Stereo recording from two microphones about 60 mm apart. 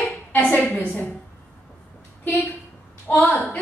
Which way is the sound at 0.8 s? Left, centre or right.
Left.